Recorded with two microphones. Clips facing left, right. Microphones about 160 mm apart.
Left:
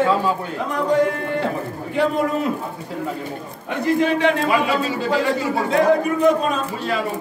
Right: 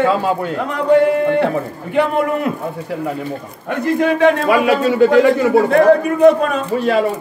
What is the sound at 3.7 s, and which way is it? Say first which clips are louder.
A man's voice: right 3 dB; 50° right (ahead or behind).